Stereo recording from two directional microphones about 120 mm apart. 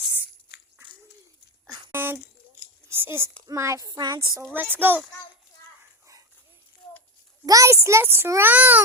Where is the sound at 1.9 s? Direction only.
20° right (ahead or behind).